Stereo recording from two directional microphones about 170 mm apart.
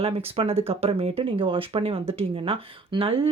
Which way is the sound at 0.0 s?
35° right (ahead or behind).